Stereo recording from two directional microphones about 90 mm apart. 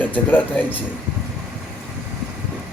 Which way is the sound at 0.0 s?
20° left (ahead or behind).